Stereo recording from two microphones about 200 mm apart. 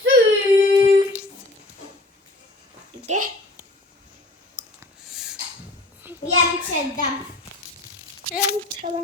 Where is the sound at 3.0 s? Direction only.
40° right (ahead or behind).